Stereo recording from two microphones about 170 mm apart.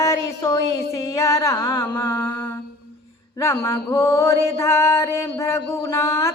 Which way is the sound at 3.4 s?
15° left (ahead or behind).